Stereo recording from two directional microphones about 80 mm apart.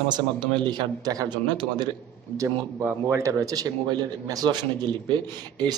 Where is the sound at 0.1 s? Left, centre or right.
Right.